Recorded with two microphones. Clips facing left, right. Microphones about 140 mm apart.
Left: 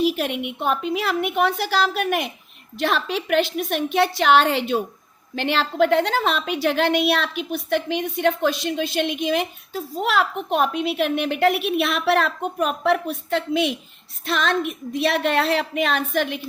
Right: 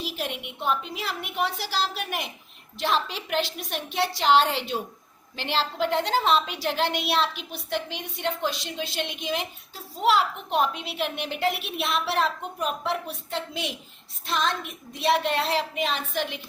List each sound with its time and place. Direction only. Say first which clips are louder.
0.0 s a woman's voice: left 11 dB; 60° left (ahead or behind)